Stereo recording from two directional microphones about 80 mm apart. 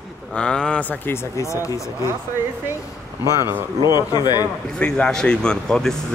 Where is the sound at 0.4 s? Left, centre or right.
Centre.